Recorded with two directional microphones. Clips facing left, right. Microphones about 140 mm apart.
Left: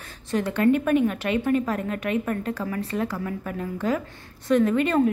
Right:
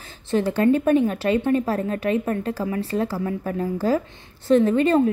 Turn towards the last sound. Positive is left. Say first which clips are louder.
# right 3 dB
turn(degrees=-30)  # may be behind; listen again after turning